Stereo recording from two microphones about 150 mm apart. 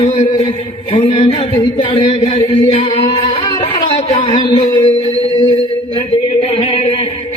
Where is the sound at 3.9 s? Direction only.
40° left (ahead or behind).